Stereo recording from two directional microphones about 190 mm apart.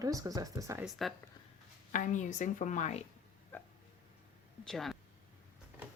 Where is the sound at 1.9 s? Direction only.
40° left (ahead or behind).